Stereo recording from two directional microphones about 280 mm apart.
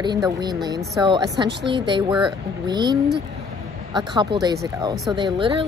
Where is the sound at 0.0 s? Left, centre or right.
Centre.